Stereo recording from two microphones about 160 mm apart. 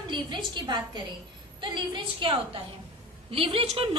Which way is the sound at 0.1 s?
30° right (ahead or behind).